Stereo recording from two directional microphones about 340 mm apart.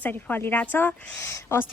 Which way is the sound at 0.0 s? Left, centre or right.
Centre.